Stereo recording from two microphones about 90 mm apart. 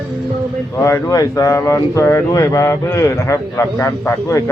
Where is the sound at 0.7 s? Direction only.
35° left (ahead or behind).